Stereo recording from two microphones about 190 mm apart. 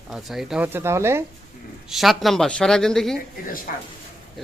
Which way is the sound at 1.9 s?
Centre (ahead or behind).